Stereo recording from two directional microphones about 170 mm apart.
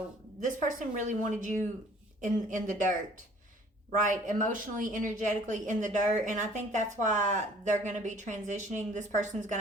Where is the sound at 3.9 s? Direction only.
50° right (ahead or behind).